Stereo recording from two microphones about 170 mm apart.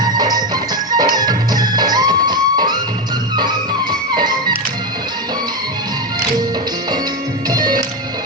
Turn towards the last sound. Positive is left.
turn(degrees=-25)  # may be behind; listen again after turning